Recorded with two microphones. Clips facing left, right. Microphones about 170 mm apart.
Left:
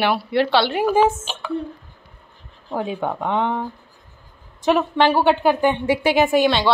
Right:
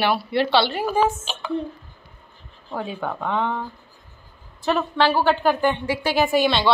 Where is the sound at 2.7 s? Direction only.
15° left (ahead or behind).